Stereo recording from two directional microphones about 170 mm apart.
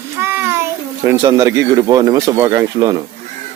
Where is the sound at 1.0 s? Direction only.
15° right (ahead or behind).